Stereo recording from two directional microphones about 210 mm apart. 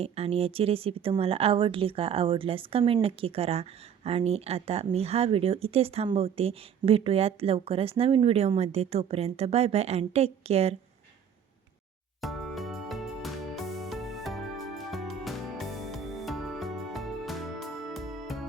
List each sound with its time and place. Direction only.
0.0 s speech: 30° right (ahead or behind)
12.2 s music: centre (ahead or behind)